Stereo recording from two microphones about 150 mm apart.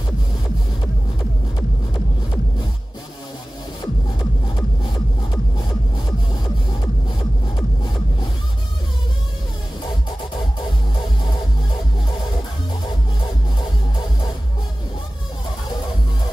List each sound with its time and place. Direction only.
3.8 s music: 30° left (ahead or behind)